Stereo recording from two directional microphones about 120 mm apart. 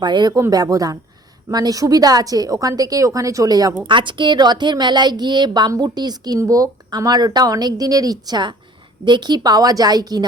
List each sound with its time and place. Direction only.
0.0 s a woman's voice: 35° right (ahead or behind)
3.8 s a woman's voice: 40° right (ahead or behind)